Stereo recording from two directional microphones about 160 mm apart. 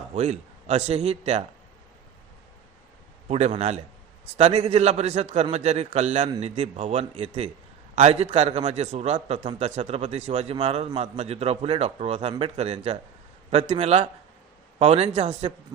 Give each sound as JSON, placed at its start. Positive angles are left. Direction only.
{"t": 0.1, "sound": "a man's voice", "side_deg": -40}
{"t": 3.2, "sound": "a man's voice", "side_deg": -40}